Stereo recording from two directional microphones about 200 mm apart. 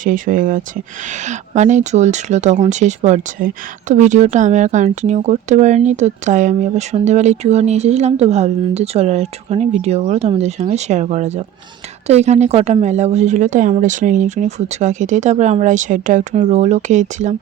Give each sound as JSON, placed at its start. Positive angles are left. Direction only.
{"t": 0.0, "sound": "speech", "side_deg": -40}